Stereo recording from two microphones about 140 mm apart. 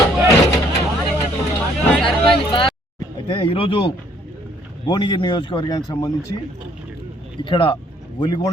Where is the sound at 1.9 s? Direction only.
5° left (ahead or behind).